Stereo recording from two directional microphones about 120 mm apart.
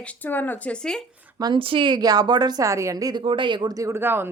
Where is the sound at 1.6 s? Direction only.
45° right (ahead or behind); by 3.2 s 30° right (ahead or behind).